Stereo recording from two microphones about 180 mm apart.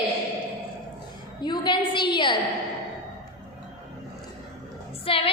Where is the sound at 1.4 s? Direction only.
25° left (ahead or behind).